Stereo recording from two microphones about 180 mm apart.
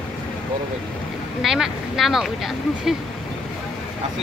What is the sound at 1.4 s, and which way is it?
Speech, centre (ahead or behind).